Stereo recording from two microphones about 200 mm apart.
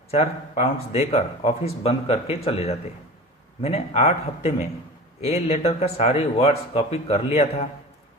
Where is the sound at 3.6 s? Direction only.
30° left (ahead or behind).